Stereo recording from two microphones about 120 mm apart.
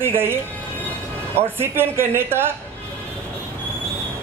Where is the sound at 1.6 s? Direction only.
20° right (ahead or behind).